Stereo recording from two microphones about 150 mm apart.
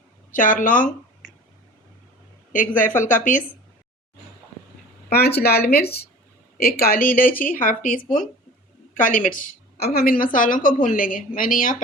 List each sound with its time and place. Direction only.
0.3 s a woman's voice: 65° left (ahead or behind)
1.2 s whispering: centre (ahead or behind)
2.5 s a woman's voice: 60° left (ahead or behind)
5.0 s a woman's voice: 90° left
10.3 s a woman's voice: 65° left (ahead or behind)